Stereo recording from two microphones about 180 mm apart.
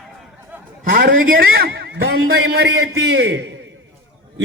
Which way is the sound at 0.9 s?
50° right (ahead or behind).